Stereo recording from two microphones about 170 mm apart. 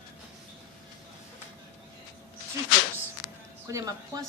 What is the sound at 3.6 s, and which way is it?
Speech, 20° right (ahead or behind).